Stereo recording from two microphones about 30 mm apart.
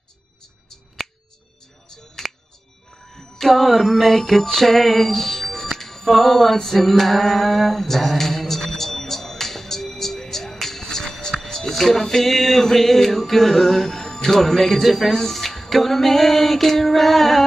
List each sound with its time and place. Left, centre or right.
1.0 s finger snapping: centre
3.1 s music: centre
11.6 s music: centre
15.0 s music: centre